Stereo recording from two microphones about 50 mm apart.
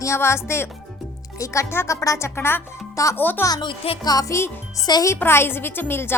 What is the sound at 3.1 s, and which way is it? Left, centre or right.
Speech, left.